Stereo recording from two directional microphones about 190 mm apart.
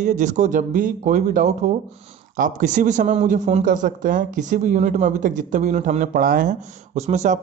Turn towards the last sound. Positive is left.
turn(degrees=-40)  # may be behind; listen again after turning